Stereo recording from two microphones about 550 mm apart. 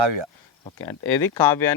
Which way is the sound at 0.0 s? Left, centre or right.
Right.